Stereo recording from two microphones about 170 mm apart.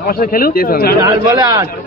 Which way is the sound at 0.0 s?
60° left (ahead or behind).